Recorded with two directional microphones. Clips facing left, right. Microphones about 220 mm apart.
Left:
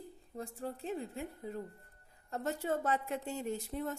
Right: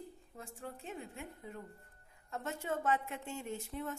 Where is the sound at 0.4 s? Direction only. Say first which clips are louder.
Left 7 dB; 35° left (ahead or behind).